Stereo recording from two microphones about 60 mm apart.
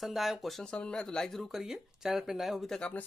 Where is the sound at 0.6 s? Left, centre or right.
Centre.